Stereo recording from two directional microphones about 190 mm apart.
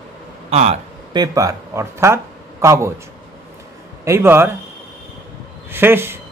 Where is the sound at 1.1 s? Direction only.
20° right (ahead or behind).